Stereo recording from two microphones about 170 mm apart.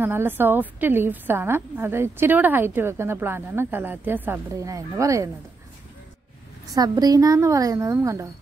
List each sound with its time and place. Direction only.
0.0 s a woman's voice: 15° right (ahead or behind)
6.7 s speech: 20° right (ahead or behind)